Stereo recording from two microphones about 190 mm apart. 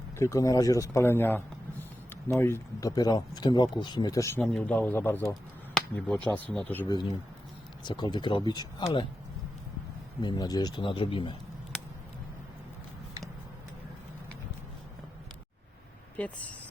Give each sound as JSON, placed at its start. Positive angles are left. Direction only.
{"t": 0.2, "sound": "speech", "side_deg": 15}
{"t": 4.4, "sound": "speech", "side_deg": 5}
{"t": 5.3, "sound": "a sound", "side_deg": 5}
{"t": 6.2, "sound": "speech", "side_deg": 5}
{"t": 6.8, "sound": "speech", "side_deg": 20}
{"t": 10.2, "sound": "speech", "side_deg": 20}
{"t": 16.1, "sound": "speech", "side_deg": 5}